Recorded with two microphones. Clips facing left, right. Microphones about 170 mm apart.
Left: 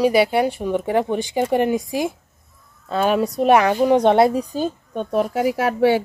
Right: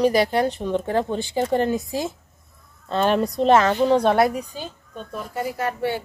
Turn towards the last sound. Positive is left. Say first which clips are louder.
# left 8 dB
turn(degrees=90)